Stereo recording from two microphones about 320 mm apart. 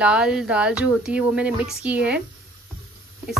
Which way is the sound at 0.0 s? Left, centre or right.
Centre.